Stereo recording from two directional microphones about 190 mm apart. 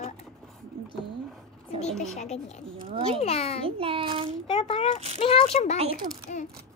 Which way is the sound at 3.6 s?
30° right (ahead or behind).